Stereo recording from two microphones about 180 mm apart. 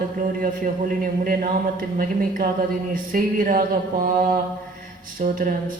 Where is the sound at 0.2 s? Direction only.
50° right (ahead or behind).